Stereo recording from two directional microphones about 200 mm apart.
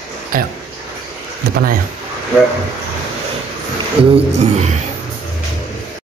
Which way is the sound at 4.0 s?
5° right (ahead or behind).